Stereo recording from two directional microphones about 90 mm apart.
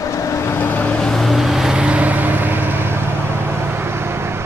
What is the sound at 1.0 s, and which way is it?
Vehicle, centre (ahead or behind).